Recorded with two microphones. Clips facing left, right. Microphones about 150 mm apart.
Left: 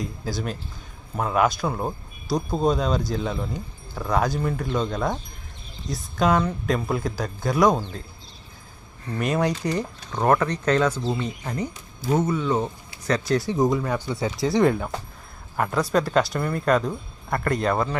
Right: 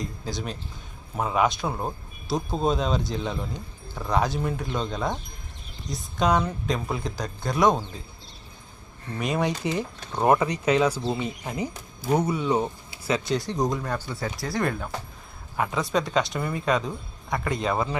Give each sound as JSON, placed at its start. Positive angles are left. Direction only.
{"t": 0.0, "sound": "speech", "side_deg": 5}
{"t": 9.1, "sound": "speech", "side_deg": 0}
{"t": 13.1, "sound": "speech", "side_deg": 0}
{"t": 14.4, "sound": "speech", "side_deg": 20}
{"t": 15.5, "sound": "speech", "side_deg": -5}